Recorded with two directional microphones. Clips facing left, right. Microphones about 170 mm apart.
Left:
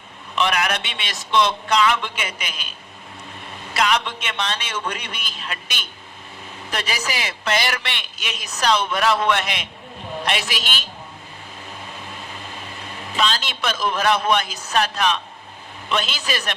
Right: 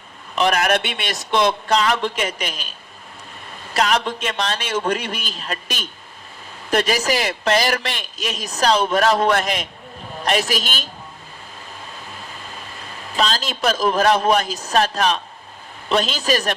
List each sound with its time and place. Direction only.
0.3 s a man's voice: 40° right (ahead or behind)
3.8 s a man's voice: 40° right (ahead or behind)
13.1 s a man's voice: 35° right (ahead or behind)